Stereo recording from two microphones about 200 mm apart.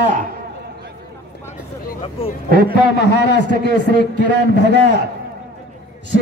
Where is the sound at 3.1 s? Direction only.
60° left (ahead or behind).